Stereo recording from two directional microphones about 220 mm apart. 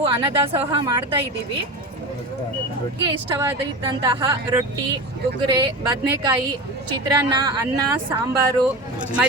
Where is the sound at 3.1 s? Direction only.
15° right (ahead or behind).